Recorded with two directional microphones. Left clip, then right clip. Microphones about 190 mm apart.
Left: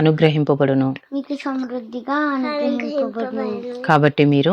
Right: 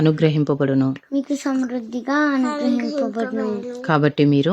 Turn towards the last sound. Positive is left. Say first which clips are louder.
# left 2 dB
turn(degrees=-15)  # may be behind; listen again after turning